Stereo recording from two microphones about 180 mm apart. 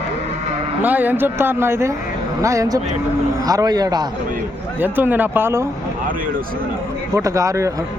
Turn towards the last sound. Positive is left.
turn(degrees=-15)  # may be behind; listen again after turning